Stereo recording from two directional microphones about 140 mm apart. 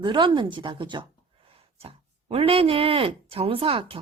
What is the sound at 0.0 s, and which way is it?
Speech, 35° right (ahead or behind).